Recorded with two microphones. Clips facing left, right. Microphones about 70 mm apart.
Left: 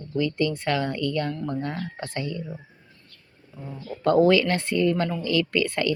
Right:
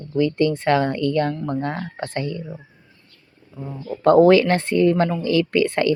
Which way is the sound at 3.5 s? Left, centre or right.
Right.